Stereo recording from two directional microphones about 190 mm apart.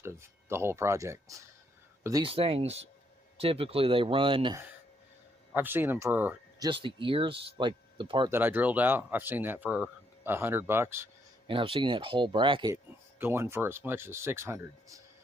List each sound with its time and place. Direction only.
0.0 s speech: 15° right (ahead or behind)
2.2 s speech: 30° right (ahead or behind)
5.5 s speech: 10° right (ahead or behind)
6.7 s speech: 25° right (ahead or behind)
8.3 s speech: 10° right (ahead or behind)
11.4 s speech: 30° right (ahead or behind)
12.7 s speech: 10° right (ahead or behind)